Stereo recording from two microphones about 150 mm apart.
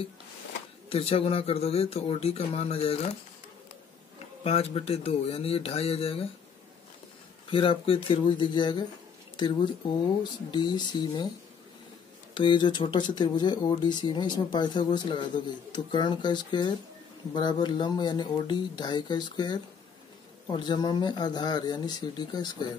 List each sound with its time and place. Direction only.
0.8 s speech: 40° left (ahead or behind)
4.5 s speech: 40° left (ahead or behind)
7.5 s speech: 35° left (ahead or behind)
10.5 s speech: 30° left (ahead or behind)
12.4 s speech: 30° left (ahead or behind)